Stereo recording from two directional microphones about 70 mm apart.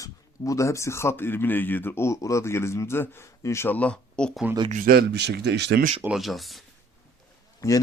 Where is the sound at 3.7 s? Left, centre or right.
Centre.